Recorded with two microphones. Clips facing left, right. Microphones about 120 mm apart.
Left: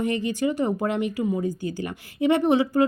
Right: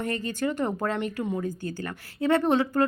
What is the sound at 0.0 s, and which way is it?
Speech, 15° left (ahead or behind).